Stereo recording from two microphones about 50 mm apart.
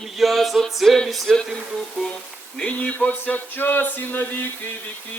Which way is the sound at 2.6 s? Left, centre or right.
Left.